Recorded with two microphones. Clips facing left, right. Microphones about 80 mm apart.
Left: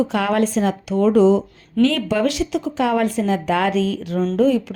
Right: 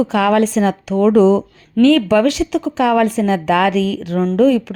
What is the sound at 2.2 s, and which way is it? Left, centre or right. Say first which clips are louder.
Speech: right 5 dB; right.